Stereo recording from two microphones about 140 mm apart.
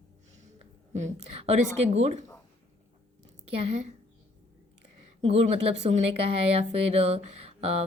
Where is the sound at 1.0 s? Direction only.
50° right (ahead or behind).